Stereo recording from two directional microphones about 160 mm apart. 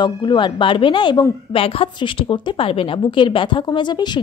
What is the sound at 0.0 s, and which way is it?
A woman's voice, 30° left (ahead or behind).